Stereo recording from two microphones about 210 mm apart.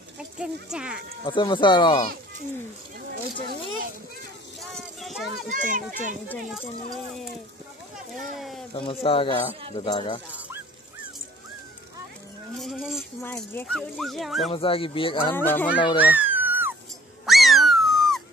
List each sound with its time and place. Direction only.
0.2 s speech: 5° right (ahead or behind)
1.2 s speech: 25° left (ahead or behind)
4.6 s a sound: centre (ahead or behind)
5.5 s speech: 40° right (ahead or behind)
6.2 s speech: 10° left (ahead or behind)
8.1 s speech: centre (ahead or behind)
8.7 s speech: 25° left (ahead or behind)
12.5 s speech: centre (ahead or behind)
13.2 s speech: 10° left (ahead or behind)
14.5 s speech: 25° left (ahead or behind)
15.3 s speech: 10° left (ahead or behind)
16.0 s a sound: 10° right (ahead or behind)